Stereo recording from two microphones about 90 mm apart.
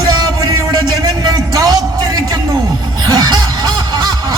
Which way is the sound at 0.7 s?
50° right (ahead or behind).